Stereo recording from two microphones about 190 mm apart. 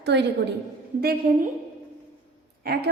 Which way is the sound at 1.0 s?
50° right (ahead or behind).